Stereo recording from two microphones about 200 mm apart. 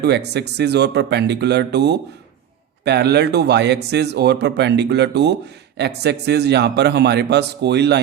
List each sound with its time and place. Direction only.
0.0 s speech: 55° right (ahead or behind)